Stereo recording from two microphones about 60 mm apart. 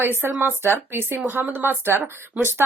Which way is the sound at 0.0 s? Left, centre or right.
Right.